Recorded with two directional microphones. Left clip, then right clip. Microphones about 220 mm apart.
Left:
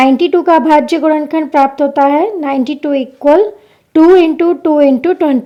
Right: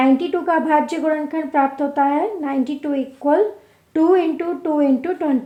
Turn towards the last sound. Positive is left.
turn(degrees=45)  # may be behind; listen again after turning